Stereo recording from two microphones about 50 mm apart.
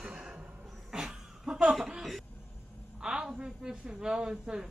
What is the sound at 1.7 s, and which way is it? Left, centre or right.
A man's voice, centre.